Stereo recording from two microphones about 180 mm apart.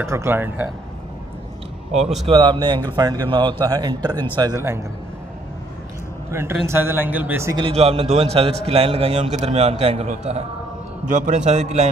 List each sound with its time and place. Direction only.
0.0 s a man's voice: 15° right (ahead or behind)
2.2 s a man's voice: 25° right (ahead or behind)
6.3 s a man's voice: 15° right (ahead or behind)
7.6 s a man's voice: 30° right (ahead or behind)